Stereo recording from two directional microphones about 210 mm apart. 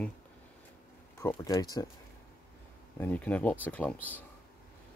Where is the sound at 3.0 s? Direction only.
5° left (ahead or behind).